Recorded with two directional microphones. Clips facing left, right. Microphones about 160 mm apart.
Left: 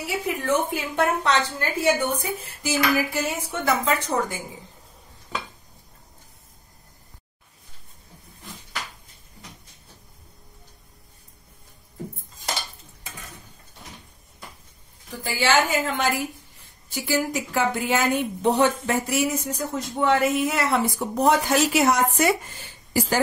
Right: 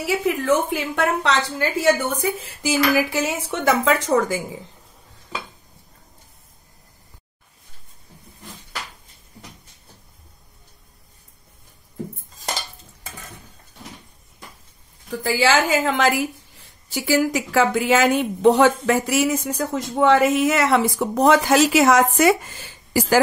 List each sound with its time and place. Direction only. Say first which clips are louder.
0.0 s a woman's voice: right 6 dB; 90° right
15.3 s a woman's voice: right 3 dB; 90° right